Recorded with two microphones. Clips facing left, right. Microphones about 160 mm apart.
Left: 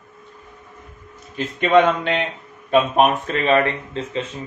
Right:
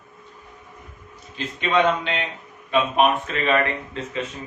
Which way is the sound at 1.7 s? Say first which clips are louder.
Left 5 dB; 45° left (ahead or behind).